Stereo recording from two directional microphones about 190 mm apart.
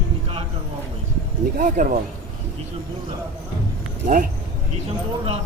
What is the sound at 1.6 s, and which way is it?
Speech, 45° right (ahead or behind).